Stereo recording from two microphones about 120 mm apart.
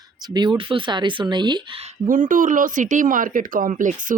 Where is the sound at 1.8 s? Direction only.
80° right.